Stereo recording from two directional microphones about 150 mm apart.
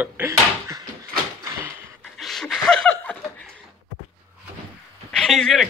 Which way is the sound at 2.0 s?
Centre (ahead or behind).